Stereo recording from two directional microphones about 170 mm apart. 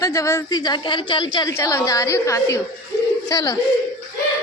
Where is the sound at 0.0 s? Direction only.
20° left (ahead or behind).